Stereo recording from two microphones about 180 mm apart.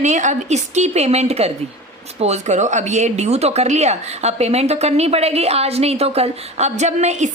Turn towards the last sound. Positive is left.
turn(degrees=-40)  # may be behind; listen again after turning